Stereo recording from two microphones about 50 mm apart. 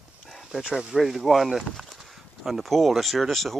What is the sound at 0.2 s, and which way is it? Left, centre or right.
Speech, centre.